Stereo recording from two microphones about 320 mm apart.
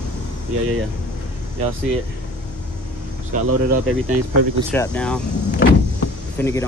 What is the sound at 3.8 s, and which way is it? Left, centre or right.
Speech, right.